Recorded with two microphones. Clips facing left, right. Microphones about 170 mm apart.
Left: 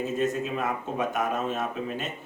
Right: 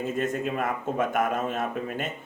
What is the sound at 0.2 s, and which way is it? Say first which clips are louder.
Speech: right 1 dB; 50° right (ahead or behind).